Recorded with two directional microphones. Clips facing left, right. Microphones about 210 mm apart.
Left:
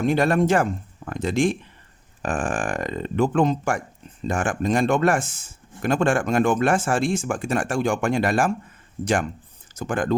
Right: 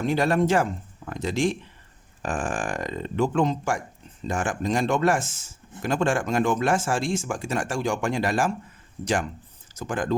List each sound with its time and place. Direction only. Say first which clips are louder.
0.0 s speech: left 3 dB; 55° left (ahead or behind)
9.7 s speech: left 3 dB; 55° left (ahead or behind)